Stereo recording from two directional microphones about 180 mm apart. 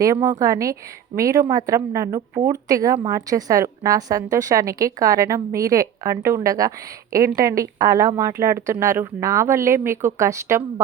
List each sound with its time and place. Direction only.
0.0 s a woman's voice: 15° right (ahead or behind)